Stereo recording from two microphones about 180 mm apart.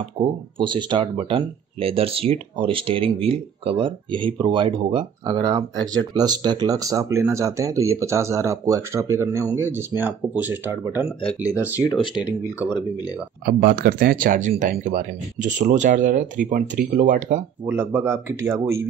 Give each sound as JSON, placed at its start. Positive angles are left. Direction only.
{"t": 0.2, "sound": "speech", "side_deg": -30}
{"t": 11.8, "sound": "speech", "side_deg": 25}
{"t": 12.5, "sound": "speech", "side_deg": -5}
{"t": 13.6, "sound": "speech", "side_deg": -60}
{"t": 17.6, "sound": "speech", "side_deg": -15}